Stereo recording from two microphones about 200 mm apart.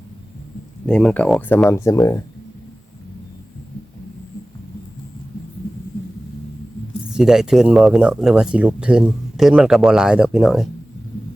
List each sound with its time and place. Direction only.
0.9 s speech: 5° left (ahead or behind)
7.1 s speech: 5° right (ahead or behind)